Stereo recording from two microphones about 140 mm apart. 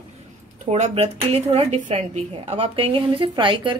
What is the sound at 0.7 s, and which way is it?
A woman's voice, 50° right (ahead or behind).